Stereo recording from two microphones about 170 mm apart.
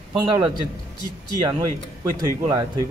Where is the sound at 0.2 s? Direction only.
25° right (ahead or behind).